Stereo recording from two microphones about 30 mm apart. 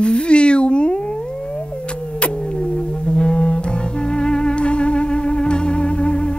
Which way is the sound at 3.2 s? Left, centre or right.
Left.